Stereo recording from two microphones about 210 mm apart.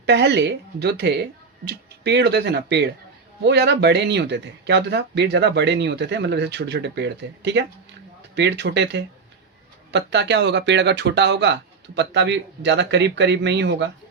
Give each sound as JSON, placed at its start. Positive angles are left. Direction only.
{"t": 0.0, "sound": "speech", "side_deg": -55}